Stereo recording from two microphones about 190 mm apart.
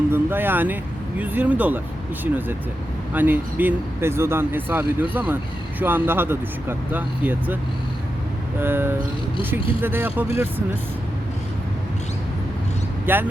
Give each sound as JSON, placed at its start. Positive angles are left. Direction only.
{"t": 0.1, "sound": "speech", "side_deg": -10}
{"t": 13.1, "sound": "speech", "side_deg": -10}